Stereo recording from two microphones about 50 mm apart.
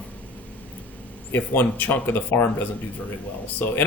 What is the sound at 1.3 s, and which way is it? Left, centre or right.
Speech, left.